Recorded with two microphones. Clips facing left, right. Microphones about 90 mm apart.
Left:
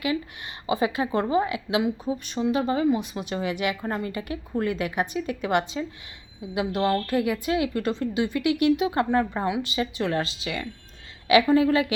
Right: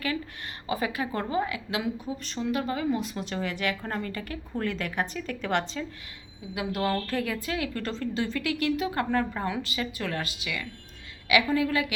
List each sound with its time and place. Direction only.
0.0 s a woman's voice: 15° left (ahead or behind)